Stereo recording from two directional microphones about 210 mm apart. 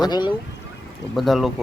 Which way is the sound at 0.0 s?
20° left (ahead or behind).